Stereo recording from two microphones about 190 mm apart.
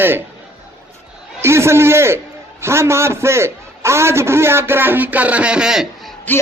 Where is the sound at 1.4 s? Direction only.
15° right (ahead or behind).